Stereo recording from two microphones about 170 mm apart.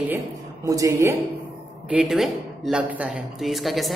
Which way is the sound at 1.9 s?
5° right (ahead or behind).